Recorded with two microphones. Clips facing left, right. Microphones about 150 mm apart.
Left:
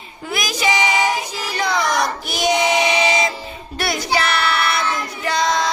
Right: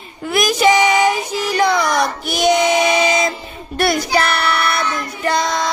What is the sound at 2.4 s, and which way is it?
Child singing, 50° right (ahead or behind).